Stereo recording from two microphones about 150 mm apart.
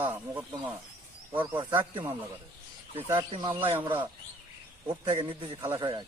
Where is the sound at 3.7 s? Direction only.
35° right (ahead or behind).